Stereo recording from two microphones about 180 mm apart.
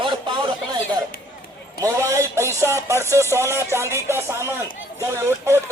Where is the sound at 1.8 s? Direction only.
15° right (ahead or behind).